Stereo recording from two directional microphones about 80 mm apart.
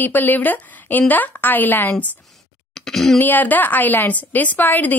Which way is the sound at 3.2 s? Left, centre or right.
Left.